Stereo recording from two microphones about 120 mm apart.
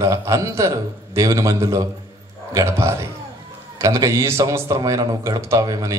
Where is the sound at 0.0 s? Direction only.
30° right (ahead or behind).